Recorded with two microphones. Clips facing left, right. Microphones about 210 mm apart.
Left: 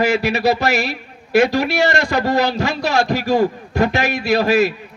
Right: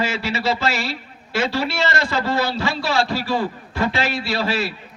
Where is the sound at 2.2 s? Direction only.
45° left (ahead or behind).